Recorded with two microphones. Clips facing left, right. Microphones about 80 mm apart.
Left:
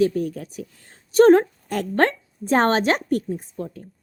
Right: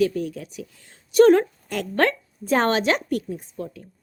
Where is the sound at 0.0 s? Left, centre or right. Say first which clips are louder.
Left 2 dB; left.